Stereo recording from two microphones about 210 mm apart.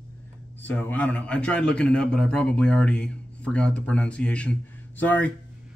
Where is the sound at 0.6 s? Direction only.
10° left (ahead or behind).